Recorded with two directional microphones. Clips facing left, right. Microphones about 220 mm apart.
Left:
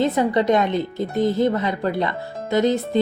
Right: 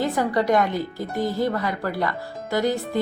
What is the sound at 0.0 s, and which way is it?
Speech, 20° left (ahead or behind).